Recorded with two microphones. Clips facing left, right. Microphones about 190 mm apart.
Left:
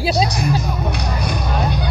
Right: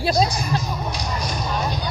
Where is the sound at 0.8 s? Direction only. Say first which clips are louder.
Left 4 dB; 60° left (ahead or behind).